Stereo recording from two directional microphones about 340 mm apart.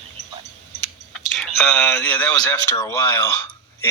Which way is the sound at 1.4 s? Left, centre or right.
Centre.